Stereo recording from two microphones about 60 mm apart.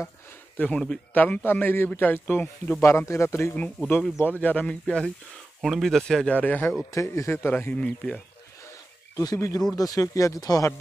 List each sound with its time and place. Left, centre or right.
0.6 s a man's voice: centre
1.1 s speech: left
2.8 s speech: left
3.5 s speech: left
4.8 s a man's voice: centre
6.2 s speech: left
7.1 s speech: left
7.7 s speech: centre
9.1 s speech: left